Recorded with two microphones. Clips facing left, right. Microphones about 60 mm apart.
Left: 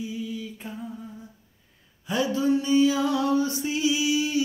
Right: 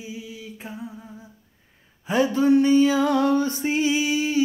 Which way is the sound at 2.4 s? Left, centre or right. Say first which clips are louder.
Right 4 dB; right.